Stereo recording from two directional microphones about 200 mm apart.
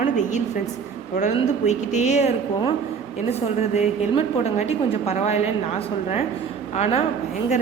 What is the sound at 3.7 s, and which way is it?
A woman's voice, 30° left (ahead or behind).